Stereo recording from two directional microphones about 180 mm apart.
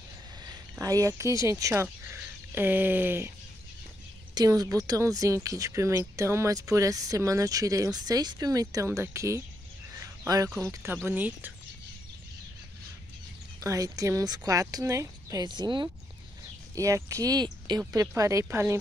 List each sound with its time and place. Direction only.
0.4 s speech: 20° right (ahead or behind)
4.4 s speech: 20° right (ahead or behind)
13.6 s speech: 20° right (ahead or behind)